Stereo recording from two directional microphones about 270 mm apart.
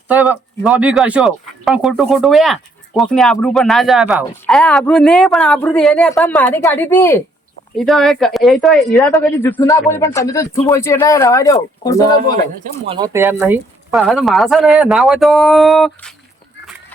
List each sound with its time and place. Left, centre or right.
0.1 s speech: centre
12.6 s speech: right
13.4 s speech: centre